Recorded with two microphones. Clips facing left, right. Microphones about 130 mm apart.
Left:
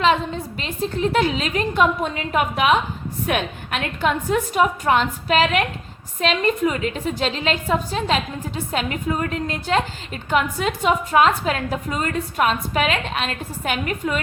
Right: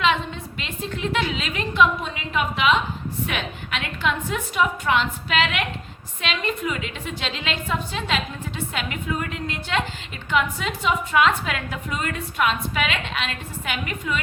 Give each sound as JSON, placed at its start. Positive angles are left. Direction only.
{"t": 0.0, "sound": "a woman's voice", "side_deg": 40}